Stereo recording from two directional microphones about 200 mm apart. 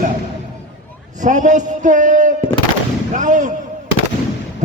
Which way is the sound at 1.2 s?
40° right (ahead or behind).